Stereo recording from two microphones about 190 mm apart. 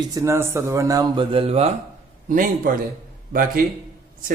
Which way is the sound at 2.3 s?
45° right (ahead or behind).